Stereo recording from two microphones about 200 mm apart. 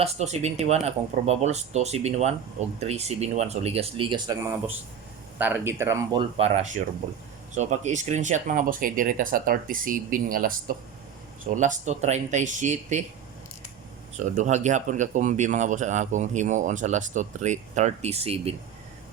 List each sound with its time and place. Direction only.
0.0 s speech: 35° right (ahead or behind)
14.2 s speech: 35° right (ahead or behind)